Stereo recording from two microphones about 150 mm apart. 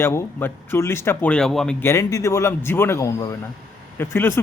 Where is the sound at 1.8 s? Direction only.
20° left (ahead or behind).